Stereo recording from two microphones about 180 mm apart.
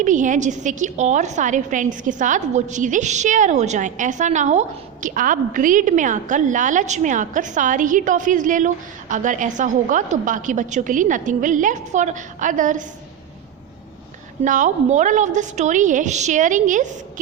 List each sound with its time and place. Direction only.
0.0 s a woman's voice: 45° right (ahead or behind)
14.4 s a woman's voice: 45° right (ahead or behind)